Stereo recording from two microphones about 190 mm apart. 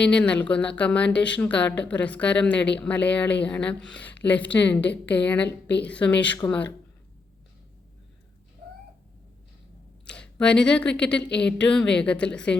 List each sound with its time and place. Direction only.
0.0 s a woman's voice: 5° left (ahead or behind)
10.1 s speech: 5° left (ahead or behind)